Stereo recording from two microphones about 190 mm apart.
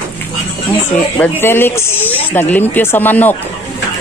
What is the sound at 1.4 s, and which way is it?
Speech, 10° left (ahead or behind).